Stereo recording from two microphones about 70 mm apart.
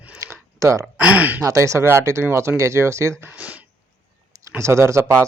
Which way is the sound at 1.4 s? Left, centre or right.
Right.